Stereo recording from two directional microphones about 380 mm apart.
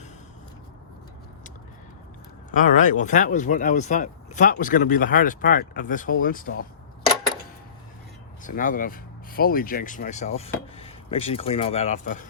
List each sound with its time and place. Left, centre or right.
2.5 s speech: centre
8.4 s speech: left